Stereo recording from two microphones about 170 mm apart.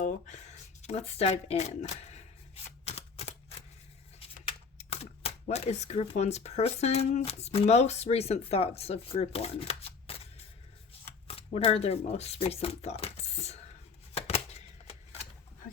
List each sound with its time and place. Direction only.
0.0 s speech: 45° left (ahead or behind)
2.8 s typewriter: 40° left (ahead or behind)
4.4 s speech: 35° left (ahead or behind)
14.1 s shuffling cards: 35° left (ahead or behind)